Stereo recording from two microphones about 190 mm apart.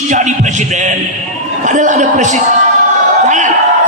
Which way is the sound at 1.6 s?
40° right (ahead or behind).